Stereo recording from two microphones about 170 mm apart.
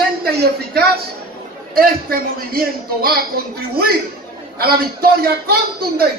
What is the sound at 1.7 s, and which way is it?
A man's voice, 60° right (ahead or behind).